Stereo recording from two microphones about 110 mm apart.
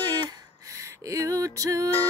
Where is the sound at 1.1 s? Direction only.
30° right (ahead or behind).